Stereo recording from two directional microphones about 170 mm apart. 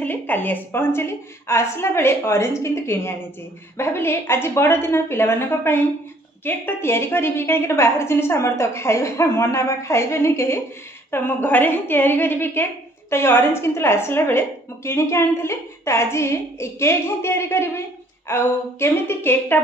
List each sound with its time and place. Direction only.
0.0 s a woman's voice: 10° left (ahead or behind)